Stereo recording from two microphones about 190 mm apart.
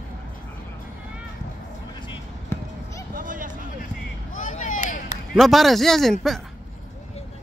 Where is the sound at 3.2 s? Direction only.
45° right (ahead or behind).